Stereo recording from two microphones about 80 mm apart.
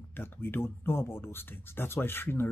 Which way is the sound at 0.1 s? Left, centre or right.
Left.